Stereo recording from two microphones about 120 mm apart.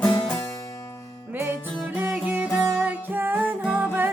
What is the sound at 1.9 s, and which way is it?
Music, 15° right (ahead or behind).